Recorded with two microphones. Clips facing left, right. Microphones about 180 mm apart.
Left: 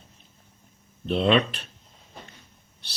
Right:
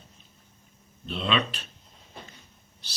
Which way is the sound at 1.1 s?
55° left (ahead or behind).